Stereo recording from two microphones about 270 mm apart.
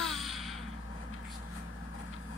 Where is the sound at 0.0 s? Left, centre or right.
Centre.